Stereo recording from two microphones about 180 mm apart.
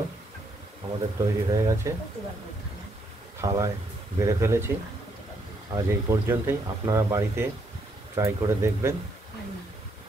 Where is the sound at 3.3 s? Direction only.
20° right (ahead or behind).